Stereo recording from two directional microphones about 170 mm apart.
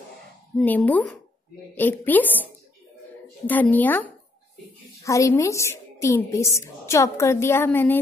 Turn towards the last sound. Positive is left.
turn(degrees=15)  # may be behind; listen again after turning